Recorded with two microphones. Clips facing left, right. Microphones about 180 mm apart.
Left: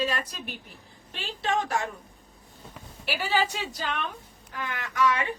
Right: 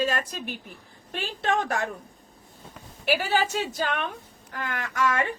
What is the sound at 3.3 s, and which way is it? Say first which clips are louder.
A woman's voice: right 2 dB; 50° right (ahead or behind).